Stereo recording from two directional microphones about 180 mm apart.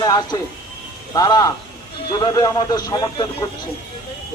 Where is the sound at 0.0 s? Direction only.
25° left (ahead or behind).